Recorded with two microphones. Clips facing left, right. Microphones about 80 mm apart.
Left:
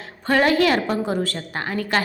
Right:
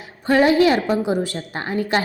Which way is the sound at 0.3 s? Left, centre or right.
Centre.